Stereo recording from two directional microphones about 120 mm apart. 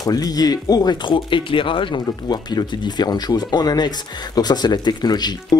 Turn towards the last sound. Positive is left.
turn(degrees=35)  # may be behind; listen again after turning